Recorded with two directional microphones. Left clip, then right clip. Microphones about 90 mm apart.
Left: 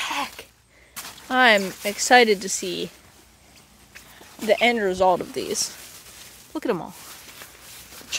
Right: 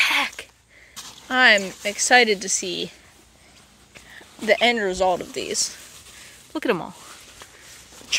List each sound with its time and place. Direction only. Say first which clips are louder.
0.0 s a sound: right 7 dB; 10° left (ahead or behind)
1.3 s speech: right 1 dB; 40° left (ahead or behind)
1.8 s speech: even; 60° left (ahead or behind); by 2.9 s 40° left (ahead or behind)
4.5 s speech: right 1 dB; 25° left (ahead or behind)
4.9 s speech: left 2 dB; 60° left (ahead or behind)
5.2 s speech: right 1 dB; 50° left (ahead or behind)
6.5 s speech: right 2 dB; centre (ahead or behind)